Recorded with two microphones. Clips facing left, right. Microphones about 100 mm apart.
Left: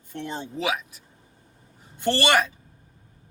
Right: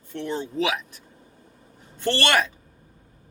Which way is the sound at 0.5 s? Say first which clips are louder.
Even; 5° left (ahead or behind).